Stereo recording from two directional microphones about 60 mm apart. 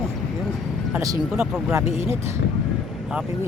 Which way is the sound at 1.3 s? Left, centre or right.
Centre.